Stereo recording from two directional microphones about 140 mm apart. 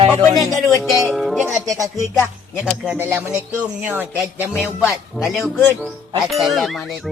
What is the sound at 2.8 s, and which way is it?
Speech, 15° right (ahead or behind).